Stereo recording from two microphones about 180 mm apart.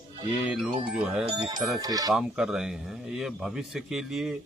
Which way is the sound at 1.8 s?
20° right (ahead or behind).